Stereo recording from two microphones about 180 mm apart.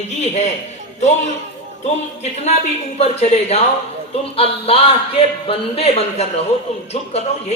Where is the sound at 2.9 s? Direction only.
35° left (ahead or behind).